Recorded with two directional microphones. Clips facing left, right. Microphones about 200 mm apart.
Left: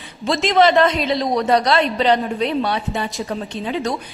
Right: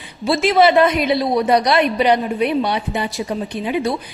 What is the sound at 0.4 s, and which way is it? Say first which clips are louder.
A woman's voice: right 1 dB; 10° right (ahead or behind).